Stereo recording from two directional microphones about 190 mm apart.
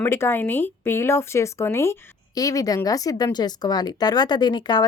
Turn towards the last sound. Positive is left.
turn(degrees=20)  # may be behind; listen again after turning